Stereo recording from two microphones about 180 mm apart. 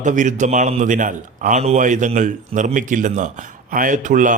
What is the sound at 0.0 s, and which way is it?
A man's voice, 45° right (ahead or behind).